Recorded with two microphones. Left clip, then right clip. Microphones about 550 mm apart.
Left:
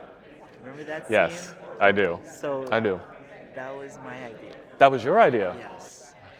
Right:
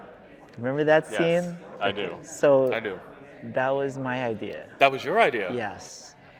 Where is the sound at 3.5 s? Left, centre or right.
Right.